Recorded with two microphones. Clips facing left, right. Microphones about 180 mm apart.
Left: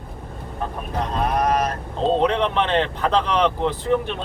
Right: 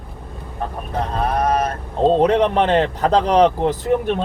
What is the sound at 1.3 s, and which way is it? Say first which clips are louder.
Speech: right 2 dB; 30° right (ahead or behind).